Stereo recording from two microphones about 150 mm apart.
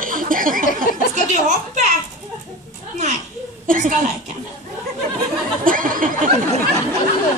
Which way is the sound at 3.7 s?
60° right (ahead or behind).